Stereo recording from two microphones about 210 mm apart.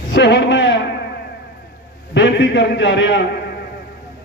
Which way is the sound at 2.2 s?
60° left (ahead or behind).